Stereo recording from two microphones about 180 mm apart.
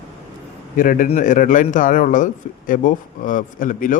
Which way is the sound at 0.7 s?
50° left (ahead or behind).